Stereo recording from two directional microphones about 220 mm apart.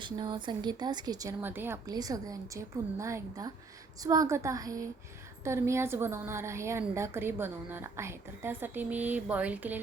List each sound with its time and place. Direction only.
0.0 s a woman's voice: 20° right (ahead or behind)